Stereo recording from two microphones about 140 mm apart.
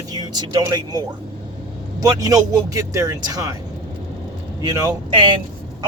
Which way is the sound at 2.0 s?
25° right (ahead or behind).